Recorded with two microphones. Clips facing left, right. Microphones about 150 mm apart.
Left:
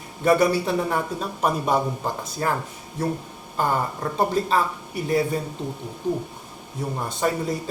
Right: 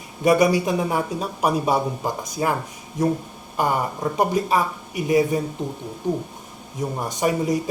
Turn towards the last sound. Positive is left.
turn(degrees=-15)  # may be behind; listen again after turning